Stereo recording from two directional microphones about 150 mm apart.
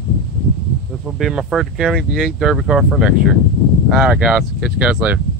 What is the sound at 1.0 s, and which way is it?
Speech, centre (ahead or behind).